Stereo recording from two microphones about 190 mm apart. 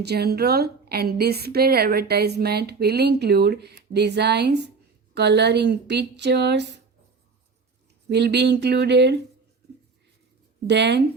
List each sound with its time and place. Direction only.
0.0 s a woman's voice: 55° right (ahead or behind)
8.1 s a woman's voice: 65° right (ahead or behind)
10.7 s a woman's voice: 65° right (ahead or behind)